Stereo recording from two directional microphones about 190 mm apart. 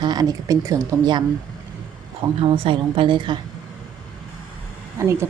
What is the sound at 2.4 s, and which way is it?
Speech, 30° right (ahead or behind).